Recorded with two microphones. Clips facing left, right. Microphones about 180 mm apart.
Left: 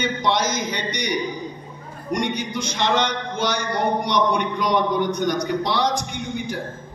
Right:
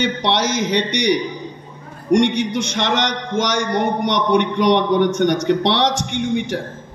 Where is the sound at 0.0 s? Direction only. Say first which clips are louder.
Right 3 dB; 75° right (ahead or behind).